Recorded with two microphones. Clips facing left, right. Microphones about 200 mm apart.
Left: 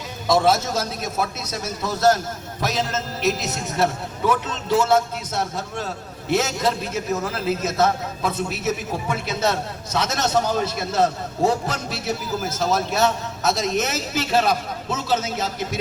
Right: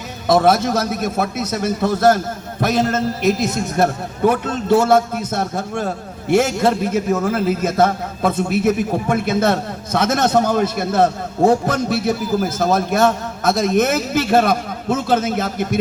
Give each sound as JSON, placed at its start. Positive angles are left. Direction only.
{"t": 0.3, "sound": "a man's voice", "side_deg": -55}